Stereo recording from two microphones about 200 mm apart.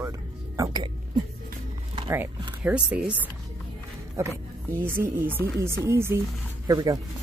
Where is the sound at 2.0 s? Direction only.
10° right (ahead or behind).